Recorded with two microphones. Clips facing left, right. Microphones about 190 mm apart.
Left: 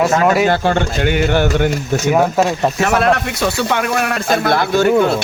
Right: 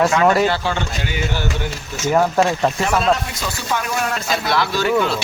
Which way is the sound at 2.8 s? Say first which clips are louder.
Left 6 dB; 65° left (ahead or behind).